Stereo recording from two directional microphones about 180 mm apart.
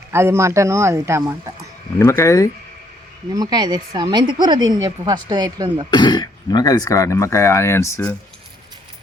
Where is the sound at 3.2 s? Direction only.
20° right (ahead or behind).